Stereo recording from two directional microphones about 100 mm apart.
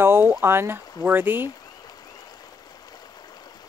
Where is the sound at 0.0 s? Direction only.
25° right (ahead or behind).